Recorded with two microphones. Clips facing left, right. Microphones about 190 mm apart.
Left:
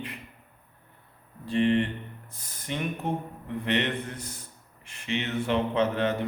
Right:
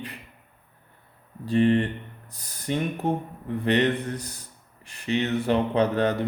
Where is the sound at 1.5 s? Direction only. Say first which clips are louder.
Right 3 dB; 40° right (ahead or behind).